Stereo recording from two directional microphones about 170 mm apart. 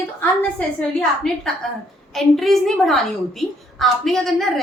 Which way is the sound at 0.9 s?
5° left (ahead or behind).